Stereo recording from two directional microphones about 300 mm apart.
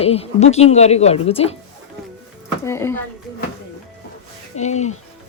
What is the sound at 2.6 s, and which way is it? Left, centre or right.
Speech, centre.